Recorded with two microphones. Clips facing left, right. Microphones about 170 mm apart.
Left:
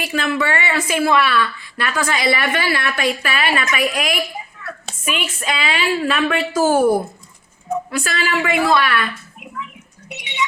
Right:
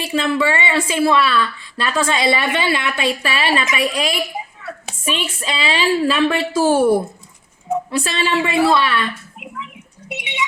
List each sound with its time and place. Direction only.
0.0 s a woman's voice: 30° right (ahead or behind)